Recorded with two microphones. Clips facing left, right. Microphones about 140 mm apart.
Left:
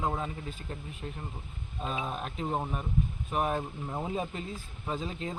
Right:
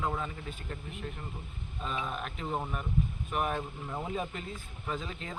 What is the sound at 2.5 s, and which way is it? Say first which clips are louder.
Speech: left 1 dB; 25° left (ahead or behind).